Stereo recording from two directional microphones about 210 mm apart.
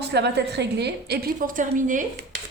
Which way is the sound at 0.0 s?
50° right (ahead or behind).